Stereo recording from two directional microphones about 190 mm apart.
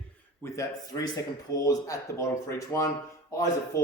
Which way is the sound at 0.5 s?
15° left (ahead or behind).